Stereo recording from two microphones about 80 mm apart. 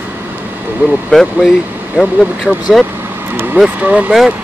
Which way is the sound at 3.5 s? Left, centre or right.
Centre.